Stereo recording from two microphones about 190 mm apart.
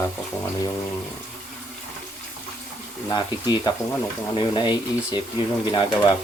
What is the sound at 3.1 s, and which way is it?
Speech, 20° left (ahead or behind).